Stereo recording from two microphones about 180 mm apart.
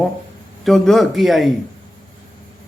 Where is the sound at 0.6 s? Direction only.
Centre (ahead or behind).